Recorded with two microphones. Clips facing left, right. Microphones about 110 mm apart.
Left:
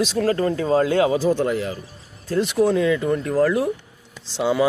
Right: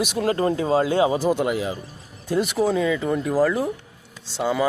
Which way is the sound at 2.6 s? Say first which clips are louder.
Left 5 dB; centre (ahead or behind).